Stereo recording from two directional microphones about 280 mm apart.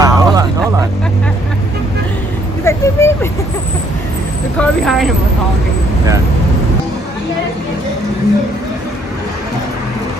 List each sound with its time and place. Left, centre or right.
0.0 s a sound: centre
2.6 s vehicle: centre
4.6 s speech: centre